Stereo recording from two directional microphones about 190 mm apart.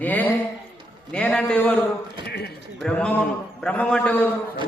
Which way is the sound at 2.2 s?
60° left (ahead or behind).